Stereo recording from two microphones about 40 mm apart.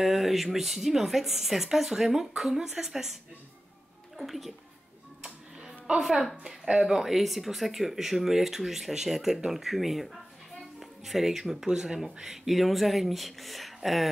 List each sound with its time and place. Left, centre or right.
0.0 s speech: centre
4.2 s speech: centre
5.9 s speech: centre